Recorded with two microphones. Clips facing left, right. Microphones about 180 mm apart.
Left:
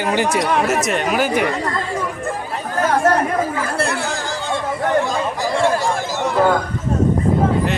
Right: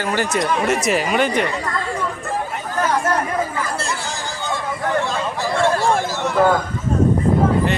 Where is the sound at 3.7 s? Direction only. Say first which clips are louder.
Left 5 dB; 60° left (ahead or behind).